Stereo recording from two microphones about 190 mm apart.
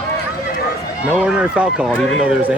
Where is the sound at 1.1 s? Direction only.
5° right (ahead or behind).